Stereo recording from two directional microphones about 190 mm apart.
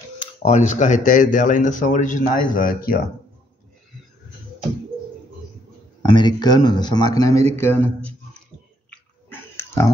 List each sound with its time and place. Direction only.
0.4 s speech: 35° left (ahead or behind)
6.0 s speech: 25° left (ahead or behind)
8.9 s a sound: 10° left (ahead or behind)